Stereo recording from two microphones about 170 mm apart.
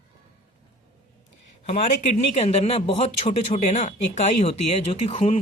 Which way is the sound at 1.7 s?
45° left (ahead or behind).